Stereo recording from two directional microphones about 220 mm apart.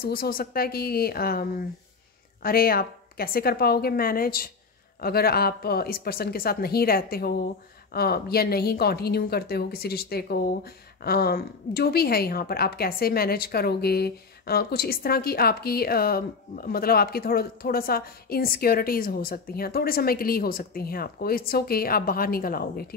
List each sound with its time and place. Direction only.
0.0 s a woman's voice: 40° left (ahead or behind)